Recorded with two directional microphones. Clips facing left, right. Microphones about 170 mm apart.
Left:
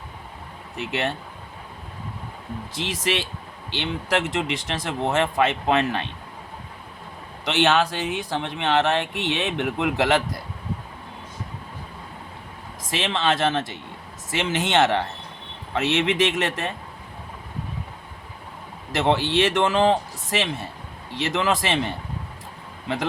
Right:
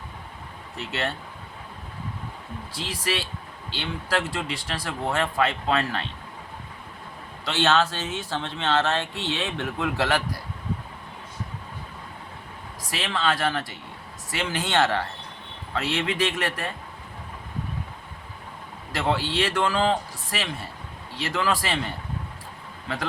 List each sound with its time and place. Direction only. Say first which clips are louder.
0.8 s speech: left 3 dB; 20° left (ahead or behind)
2.7 s speech: left 3 dB; 20° left (ahead or behind)
7.4 s speech: left 2 dB; 20° left (ahead or behind)
12.9 s speech: left 3 dB; 20° left (ahead or behind)
18.9 s speech: left 4 dB; 20° left (ahead or behind)